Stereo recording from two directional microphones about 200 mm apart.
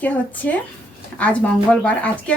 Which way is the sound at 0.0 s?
10° left (ahead or behind).